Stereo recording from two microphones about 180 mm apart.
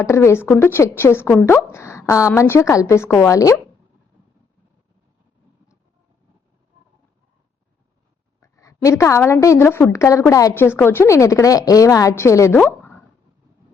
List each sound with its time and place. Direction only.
0.0 s a woman's voice: 15° left (ahead or behind)
8.4 s a woman's voice: 15° left (ahead or behind)